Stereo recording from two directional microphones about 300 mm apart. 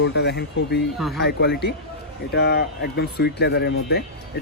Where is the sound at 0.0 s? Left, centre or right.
Left.